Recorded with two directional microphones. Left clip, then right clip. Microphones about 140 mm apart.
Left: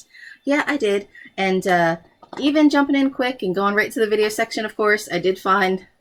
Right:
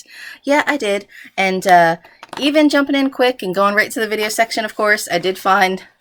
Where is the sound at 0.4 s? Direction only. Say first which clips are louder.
Right 4 dB; 15° right (ahead or behind).